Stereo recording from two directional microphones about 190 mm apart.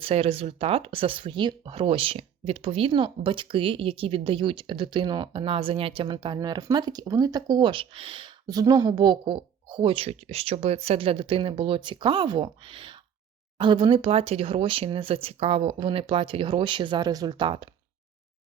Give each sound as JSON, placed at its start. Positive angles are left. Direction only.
{"t": 0.0, "sound": "speech", "side_deg": -30}